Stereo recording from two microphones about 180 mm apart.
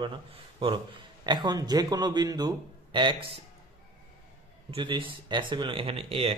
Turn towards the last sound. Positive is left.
turn(degrees=-30)  # may be behind; listen again after turning